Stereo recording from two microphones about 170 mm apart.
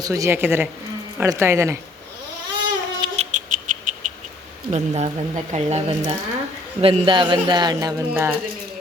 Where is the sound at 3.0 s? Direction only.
40° right (ahead or behind).